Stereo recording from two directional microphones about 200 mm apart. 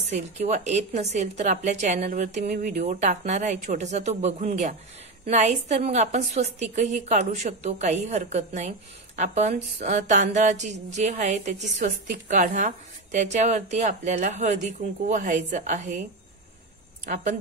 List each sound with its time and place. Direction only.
0.1 s a woman's voice: 35° right (ahead or behind)
17.0 s a woman's voice: 40° right (ahead or behind)